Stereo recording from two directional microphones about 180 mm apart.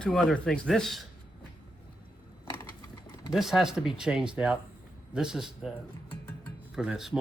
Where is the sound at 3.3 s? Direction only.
Centre (ahead or behind).